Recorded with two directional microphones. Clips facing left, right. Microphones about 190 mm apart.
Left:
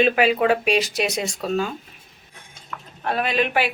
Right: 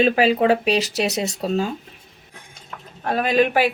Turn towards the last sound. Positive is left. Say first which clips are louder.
# right 4 dB
turn(degrees=-45)  # may be behind; listen again after turning